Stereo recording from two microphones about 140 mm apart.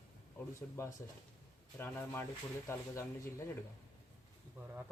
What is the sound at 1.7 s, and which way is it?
Speech, 15° left (ahead or behind).